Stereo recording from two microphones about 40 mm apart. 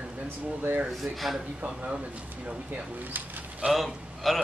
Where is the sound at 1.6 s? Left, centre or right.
Right.